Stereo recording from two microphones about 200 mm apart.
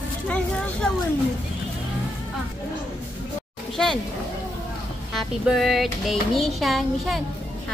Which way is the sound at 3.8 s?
5° left (ahead or behind).